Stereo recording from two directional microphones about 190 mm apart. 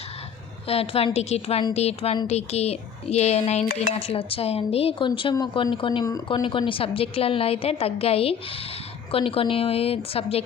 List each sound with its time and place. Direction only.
0.7 s speech: 30° left (ahead or behind)